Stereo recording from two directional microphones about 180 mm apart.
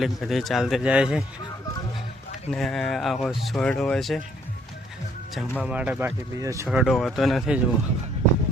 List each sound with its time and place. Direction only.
0.0 s speech: centre (ahead or behind)
2.5 s speech: 5° left (ahead or behind)
5.3 s speech: centre (ahead or behind); by 6.7 s 15° right (ahead or behind)
6.7 s speech: centre (ahead or behind)